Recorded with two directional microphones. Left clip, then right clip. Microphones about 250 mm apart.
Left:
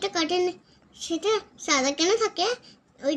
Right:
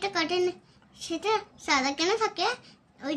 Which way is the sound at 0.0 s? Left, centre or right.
Centre.